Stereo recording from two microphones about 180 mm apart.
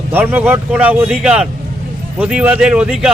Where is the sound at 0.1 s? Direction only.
10° right (ahead or behind).